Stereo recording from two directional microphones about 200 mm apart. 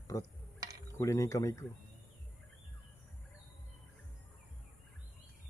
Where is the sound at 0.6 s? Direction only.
15° right (ahead or behind).